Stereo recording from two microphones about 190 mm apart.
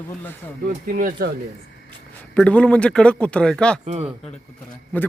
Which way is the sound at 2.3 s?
5° left (ahead or behind).